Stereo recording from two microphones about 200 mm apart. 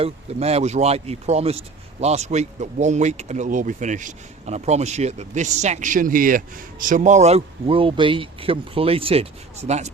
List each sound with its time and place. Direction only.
0.0 s speech: 30° right (ahead or behind)